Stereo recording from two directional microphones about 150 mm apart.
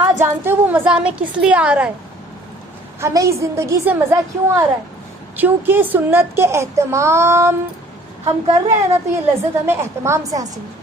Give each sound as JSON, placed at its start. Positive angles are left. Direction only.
{"t": 0.0, "sound": "a child's voice", "side_deg": -15}
{"t": 3.0, "sound": "a woman's voice", "side_deg": -20}
{"t": 8.6, "sound": "a woman's voice", "side_deg": -15}